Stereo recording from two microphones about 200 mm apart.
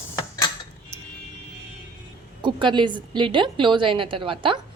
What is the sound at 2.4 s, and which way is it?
A woman's voice, 25° right (ahead or behind).